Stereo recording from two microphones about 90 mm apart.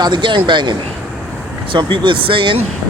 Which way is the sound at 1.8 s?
65° right (ahead or behind).